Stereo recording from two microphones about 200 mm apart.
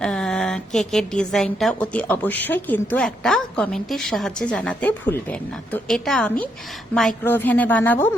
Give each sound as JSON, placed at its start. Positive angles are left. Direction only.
{"t": 0.0, "sound": "a woman's voice", "side_deg": 5}